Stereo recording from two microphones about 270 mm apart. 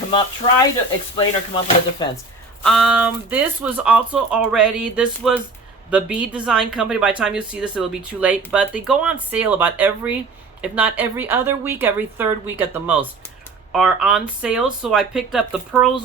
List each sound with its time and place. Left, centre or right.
1.1 s speech: centre
2.6 s a woman's voice: centre